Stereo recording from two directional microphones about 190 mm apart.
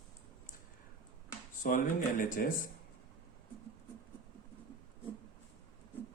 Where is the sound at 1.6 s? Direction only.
45° left (ahead or behind).